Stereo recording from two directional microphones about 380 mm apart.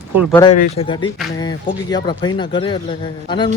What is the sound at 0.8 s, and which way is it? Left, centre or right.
Speech, centre.